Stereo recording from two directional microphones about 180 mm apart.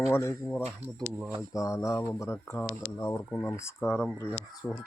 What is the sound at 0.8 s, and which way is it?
Speech, 10° right (ahead or behind).